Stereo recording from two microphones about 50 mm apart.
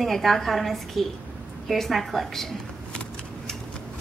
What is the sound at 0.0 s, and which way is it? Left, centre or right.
A woman's voice, centre.